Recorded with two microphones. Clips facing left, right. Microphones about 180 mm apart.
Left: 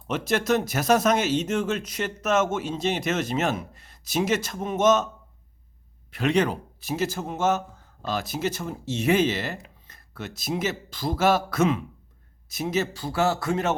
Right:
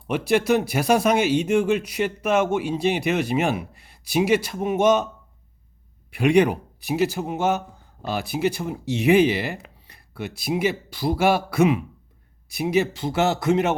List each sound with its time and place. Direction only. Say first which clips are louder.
0.1 s speech: right 4 dB; 10° right (ahead or behind)
6.1 s speech: right 5 dB; 10° right (ahead or behind)